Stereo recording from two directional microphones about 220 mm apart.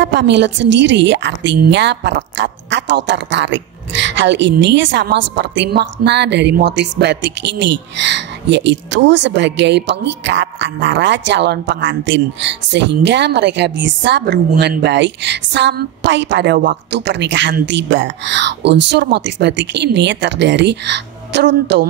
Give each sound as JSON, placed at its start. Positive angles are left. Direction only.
{"t": 0.0, "sound": "a woman's voice", "side_deg": -55}